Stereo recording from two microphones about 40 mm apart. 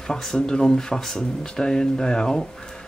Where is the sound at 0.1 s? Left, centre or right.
Centre.